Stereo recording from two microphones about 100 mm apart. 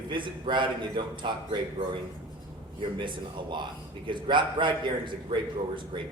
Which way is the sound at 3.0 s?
55° right (ahead or behind).